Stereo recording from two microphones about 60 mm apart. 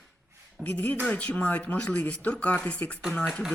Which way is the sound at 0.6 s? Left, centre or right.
Left.